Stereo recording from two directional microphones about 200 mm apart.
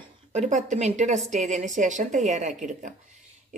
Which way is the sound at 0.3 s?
35° right (ahead or behind).